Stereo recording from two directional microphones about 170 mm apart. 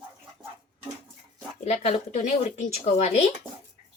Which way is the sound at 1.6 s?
40° left (ahead or behind).